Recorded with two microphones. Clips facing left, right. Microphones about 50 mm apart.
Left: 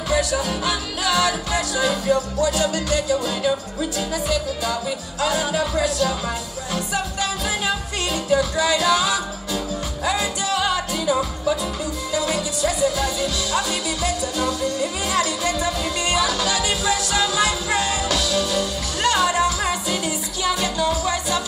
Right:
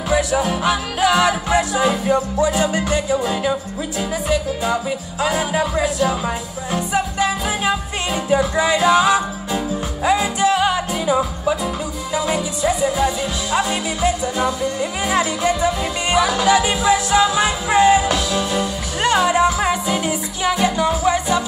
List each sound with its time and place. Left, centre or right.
0.1 s music: right